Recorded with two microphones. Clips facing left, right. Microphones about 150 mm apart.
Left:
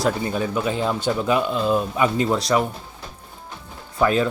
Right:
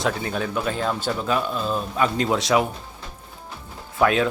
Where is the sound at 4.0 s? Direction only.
Centre (ahead or behind).